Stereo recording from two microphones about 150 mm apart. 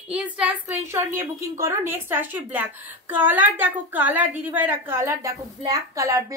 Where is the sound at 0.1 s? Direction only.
10° right (ahead or behind).